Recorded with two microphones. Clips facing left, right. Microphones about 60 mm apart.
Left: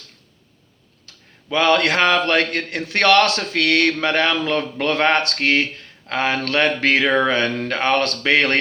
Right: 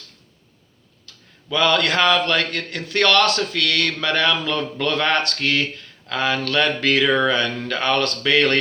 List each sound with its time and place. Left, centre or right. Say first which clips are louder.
1.0 s a man's voice: left 1 dB; left